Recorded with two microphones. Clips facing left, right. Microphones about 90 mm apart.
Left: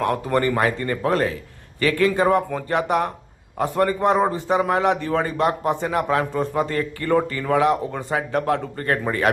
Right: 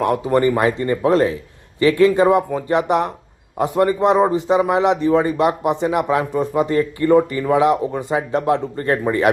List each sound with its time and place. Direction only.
0.0 s speech: 20° right (ahead or behind)